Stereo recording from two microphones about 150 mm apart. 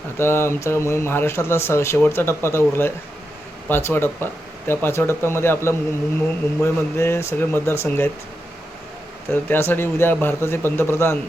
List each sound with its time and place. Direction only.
0.2 s speech: 15° left (ahead or behind)
9.3 s speech: 15° left (ahead or behind)